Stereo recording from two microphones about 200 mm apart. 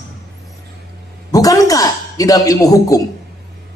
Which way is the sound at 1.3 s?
15° left (ahead or behind).